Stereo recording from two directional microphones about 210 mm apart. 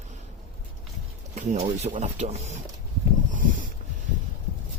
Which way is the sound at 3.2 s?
40° right (ahead or behind).